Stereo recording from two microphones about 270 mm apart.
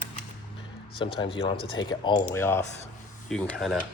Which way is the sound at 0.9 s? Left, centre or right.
Centre.